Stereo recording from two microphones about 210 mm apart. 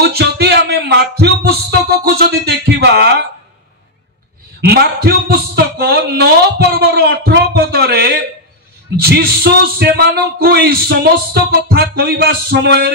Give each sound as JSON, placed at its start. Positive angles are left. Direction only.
{"t": 0.0, "sound": "music", "side_deg": -50}
{"t": 4.6, "sound": "speech", "side_deg": -50}